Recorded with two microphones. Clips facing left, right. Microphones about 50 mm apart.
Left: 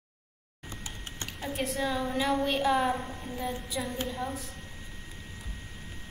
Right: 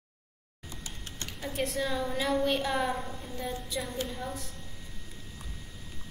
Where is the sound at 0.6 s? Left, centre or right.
Left.